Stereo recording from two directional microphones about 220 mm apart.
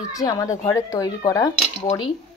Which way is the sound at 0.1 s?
15° left (ahead or behind).